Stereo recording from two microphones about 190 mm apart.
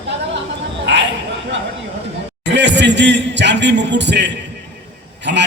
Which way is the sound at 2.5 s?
65° right (ahead or behind).